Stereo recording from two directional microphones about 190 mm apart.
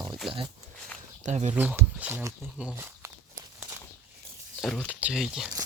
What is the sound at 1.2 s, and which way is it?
Speech, 35° right (ahead or behind).